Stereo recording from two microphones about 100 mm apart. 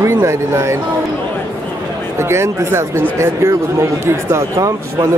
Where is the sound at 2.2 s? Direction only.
25° right (ahead or behind).